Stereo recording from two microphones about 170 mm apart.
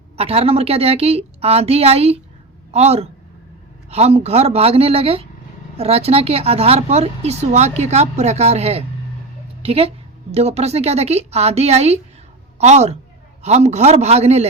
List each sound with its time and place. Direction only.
0.2 s a woman's voice: 35° right (ahead or behind)